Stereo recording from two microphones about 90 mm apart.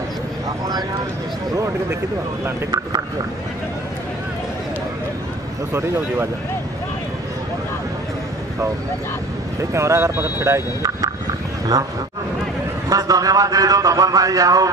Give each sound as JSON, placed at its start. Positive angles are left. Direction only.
{"t": 5.7, "sound": "speech", "side_deg": -30}
{"t": 9.6, "sound": "a man's voice", "side_deg": -35}
{"t": 12.9, "sound": "a man's voice", "side_deg": -40}